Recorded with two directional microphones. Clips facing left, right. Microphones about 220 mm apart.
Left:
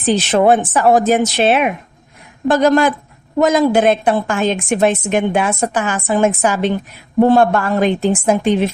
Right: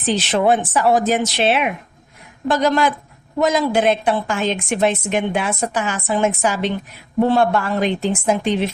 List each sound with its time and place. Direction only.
0.0 s a woman's voice: 50° left (ahead or behind)